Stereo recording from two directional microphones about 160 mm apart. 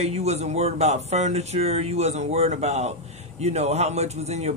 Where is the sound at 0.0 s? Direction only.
40° right (ahead or behind).